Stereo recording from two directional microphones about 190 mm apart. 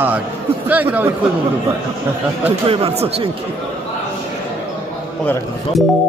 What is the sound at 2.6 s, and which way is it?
Speech, 30° right (ahead or behind).